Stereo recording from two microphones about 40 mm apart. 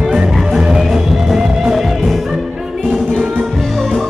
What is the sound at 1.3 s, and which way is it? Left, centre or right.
Music, centre.